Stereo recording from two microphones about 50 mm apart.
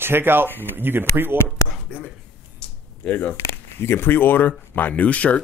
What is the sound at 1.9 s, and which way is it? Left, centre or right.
Speech, left.